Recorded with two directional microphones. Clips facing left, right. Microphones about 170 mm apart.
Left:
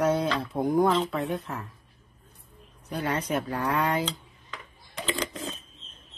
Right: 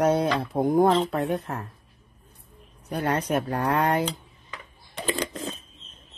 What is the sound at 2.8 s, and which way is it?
Speech, 60° right (ahead or behind).